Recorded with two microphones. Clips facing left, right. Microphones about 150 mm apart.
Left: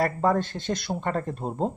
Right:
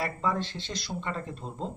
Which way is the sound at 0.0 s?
50° left (ahead or behind).